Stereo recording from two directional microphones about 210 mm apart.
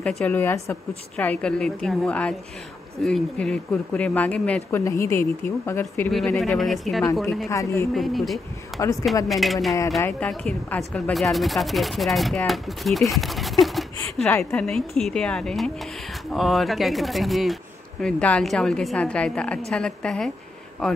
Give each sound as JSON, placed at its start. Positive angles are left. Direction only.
{"t": 0.2, "sound": "speech", "side_deg": 10}
{"t": 7.4, "sound": "speech", "side_deg": 15}
{"t": 7.9, "sound": "speech", "side_deg": 0}